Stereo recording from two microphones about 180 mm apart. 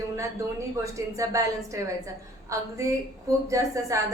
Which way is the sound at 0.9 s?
15° right (ahead or behind).